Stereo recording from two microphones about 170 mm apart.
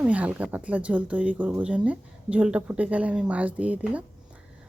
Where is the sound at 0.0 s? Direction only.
10° right (ahead or behind).